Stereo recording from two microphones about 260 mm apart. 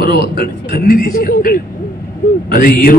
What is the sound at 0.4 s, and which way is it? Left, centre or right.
A man's voice, left.